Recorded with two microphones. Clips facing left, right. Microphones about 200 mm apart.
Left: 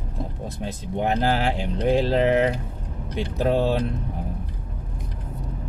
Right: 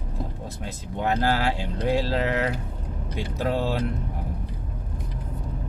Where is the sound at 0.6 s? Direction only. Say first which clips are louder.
Left 4 dB; 20° left (ahead or behind).